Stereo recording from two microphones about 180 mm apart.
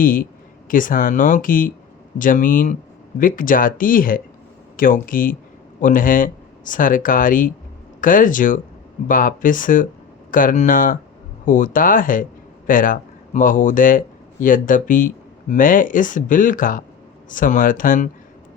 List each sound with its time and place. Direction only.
0.0 s speech: 50° left (ahead or behind)